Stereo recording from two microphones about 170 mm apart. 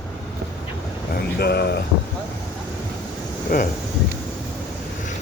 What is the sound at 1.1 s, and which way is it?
Speech, 70° left (ahead or behind).